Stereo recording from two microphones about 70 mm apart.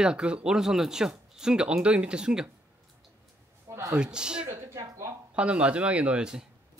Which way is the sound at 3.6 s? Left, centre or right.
Right.